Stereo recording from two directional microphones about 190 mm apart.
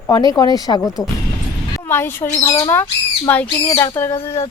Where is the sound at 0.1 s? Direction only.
20° left (ahead or behind).